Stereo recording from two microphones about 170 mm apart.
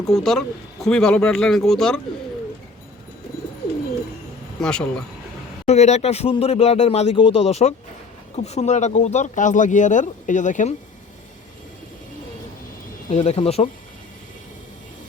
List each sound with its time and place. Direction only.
0.0 s speech: centre (ahead or behind)
4.6 s speech: 5° left (ahead or behind)
5.6 s speech: 40° left (ahead or behind)
13.1 s speech: 40° left (ahead or behind)